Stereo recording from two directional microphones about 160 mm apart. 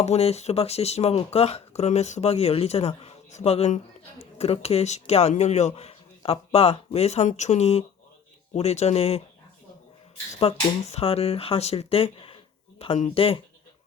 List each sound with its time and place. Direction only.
0.0 s speech: 40° left (ahead or behind)
10.3 s speech: 40° left (ahead or behind)